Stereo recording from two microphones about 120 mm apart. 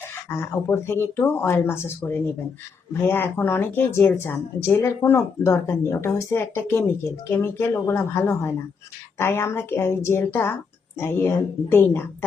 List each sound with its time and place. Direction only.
0.1 s speech: 20° left (ahead or behind)